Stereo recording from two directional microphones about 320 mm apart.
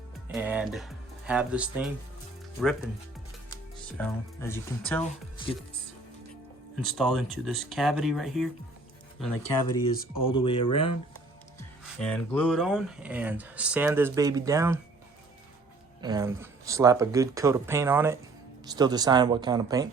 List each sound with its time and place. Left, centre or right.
0.3 s speech: centre
3.9 s speech: centre
6.8 s speech: centre
9.9 s speech: centre
11.9 s speech: centre
16.0 s speech: centre